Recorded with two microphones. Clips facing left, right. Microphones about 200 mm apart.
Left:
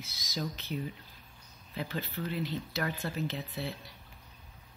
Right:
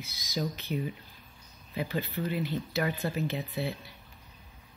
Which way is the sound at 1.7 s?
10° right (ahead or behind).